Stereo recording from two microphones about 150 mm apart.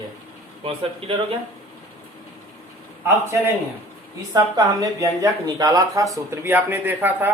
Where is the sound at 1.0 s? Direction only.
40° right (ahead or behind).